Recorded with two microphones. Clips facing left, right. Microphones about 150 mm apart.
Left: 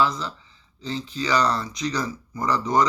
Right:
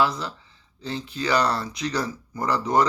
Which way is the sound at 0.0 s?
60° right (ahead or behind).